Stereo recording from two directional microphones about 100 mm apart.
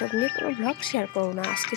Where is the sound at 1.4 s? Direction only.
55° left (ahead or behind).